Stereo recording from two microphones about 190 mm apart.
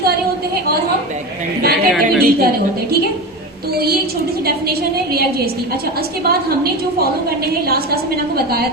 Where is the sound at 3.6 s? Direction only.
55° right (ahead or behind).